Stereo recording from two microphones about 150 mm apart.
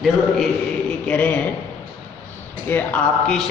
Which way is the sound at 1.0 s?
5° left (ahead or behind).